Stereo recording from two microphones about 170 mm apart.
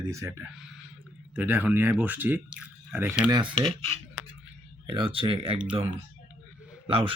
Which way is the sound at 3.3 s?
30° right (ahead or behind).